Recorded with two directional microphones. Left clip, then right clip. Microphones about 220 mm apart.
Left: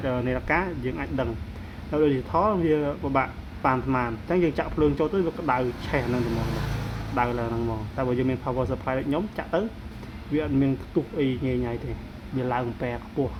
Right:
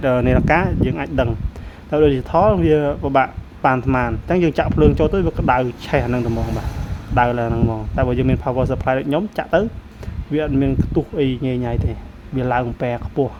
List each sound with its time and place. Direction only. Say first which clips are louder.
0.0 s speech: right 10 dB; 55° right (ahead or behind)
7.2 s speech: right 9 dB; 50° right (ahead or behind)